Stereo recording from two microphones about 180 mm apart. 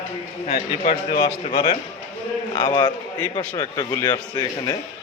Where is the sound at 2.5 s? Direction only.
25° left (ahead or behind).